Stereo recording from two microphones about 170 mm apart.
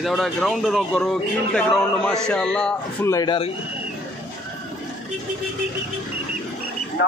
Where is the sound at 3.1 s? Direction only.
20° left (ahead or behind).